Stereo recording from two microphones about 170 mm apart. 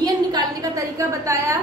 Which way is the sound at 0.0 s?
20° right (ahead or behind).